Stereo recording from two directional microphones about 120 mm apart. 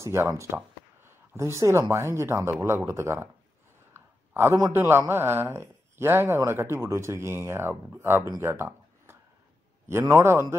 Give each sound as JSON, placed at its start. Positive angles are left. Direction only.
{"t": 0.0, "sound": "a man's voice", "side_deg": -25}
{"t": 4.3, "sound": "a man's voice", "side_deg": -20}